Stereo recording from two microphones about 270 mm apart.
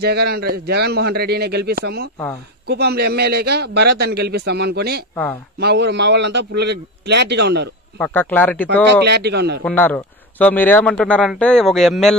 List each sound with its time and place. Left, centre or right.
0.0 s a man's voice: right
5.1 s speech: centre
5.6 s a man's voice: right
8.0 s speech: centre
9.0 s a man's voice: right
9.7 s a man's voice: centre